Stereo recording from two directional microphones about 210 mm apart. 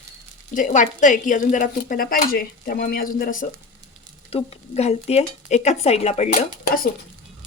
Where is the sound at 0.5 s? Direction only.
35° left (ahead or behind).